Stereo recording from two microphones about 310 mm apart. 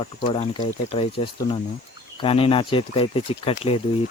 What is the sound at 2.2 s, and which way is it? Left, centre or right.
Speech, centre.